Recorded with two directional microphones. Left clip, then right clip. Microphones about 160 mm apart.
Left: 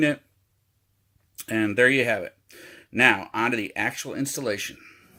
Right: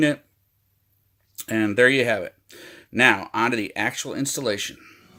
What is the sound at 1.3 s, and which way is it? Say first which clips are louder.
Speech: right 2 dB; centre (ahead or behind).